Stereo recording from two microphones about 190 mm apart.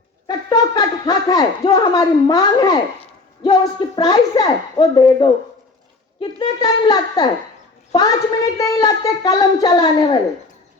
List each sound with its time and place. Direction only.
0.3 s speech: 20° left (ahead or behind)
6.6 s speech: 20° left (ahead or behind)